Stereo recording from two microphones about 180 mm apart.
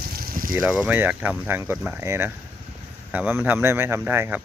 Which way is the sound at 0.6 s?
10° right (ahead or behind).